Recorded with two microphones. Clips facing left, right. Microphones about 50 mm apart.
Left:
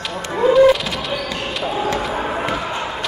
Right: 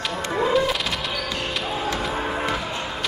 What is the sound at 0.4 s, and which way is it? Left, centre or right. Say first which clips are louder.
Music: left 10 dB; centre.